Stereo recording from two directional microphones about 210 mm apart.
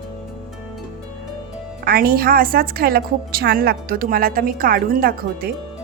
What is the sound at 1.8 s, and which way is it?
A woman's voice, 45° right (ahead or behind).